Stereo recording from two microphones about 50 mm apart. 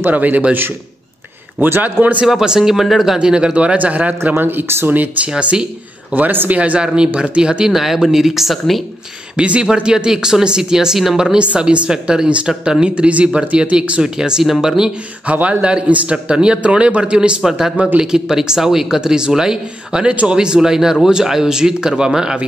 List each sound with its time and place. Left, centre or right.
0.0 s a man's voice: right
1.6 s a man's voice: right
2.2 s speech: centre
3.2 s a man's voice: centre
4.4 s speech: right
4.9 s a man's voice: right
6.1 s a man's voice: right
6.5 s a man's voice: right
6.8 s speech: centre
9.4 s speech: centre
11.3 s a man's voice: right
14.0 s speech: centre
15.3 s a man's voice: right
17.4 s speech: centre